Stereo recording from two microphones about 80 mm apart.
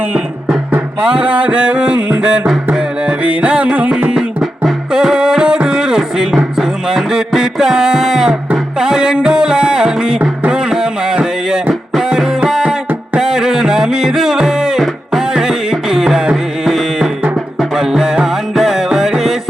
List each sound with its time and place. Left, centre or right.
0.1 s music: centre